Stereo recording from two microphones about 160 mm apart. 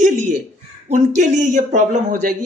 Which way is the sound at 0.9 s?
50° right (ahead or behind).